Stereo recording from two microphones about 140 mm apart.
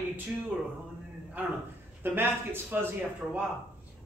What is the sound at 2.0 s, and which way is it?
Speech, 15° right (ahead or behind).